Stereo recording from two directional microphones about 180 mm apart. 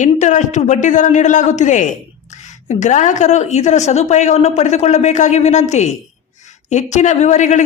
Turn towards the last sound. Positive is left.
turn(degrees=40)  # may be behind; listen again after turning